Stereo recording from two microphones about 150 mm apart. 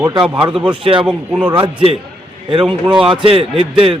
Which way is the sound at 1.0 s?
15° right (ahead or behind).